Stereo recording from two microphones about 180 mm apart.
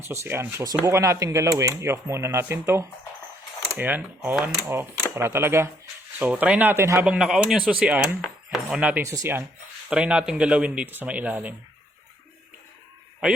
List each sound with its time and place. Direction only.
0.0 s speech: 15° right (ahead or behind)
7.0 s speech: 5° right (ahead or behind)
9.9 s speech: 5° right (ahead or behind)